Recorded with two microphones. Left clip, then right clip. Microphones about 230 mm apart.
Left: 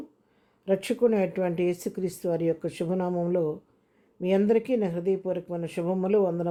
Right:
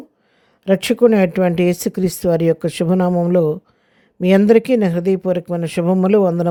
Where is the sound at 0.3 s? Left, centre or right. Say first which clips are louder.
Right 10 dB; right.